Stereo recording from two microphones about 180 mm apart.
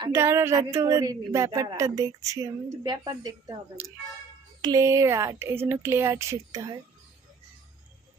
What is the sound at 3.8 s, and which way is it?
Speech, 10° right (ahead or behind).